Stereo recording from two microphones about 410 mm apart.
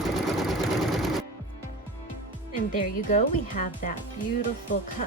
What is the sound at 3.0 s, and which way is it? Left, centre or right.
Speech, centre.